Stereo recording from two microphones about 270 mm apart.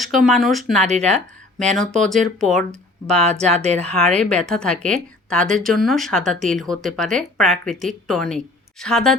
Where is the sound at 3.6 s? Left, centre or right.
Right.